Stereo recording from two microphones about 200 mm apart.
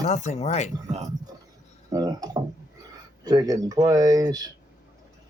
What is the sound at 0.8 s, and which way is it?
Speech, 35° right (ahead or behind).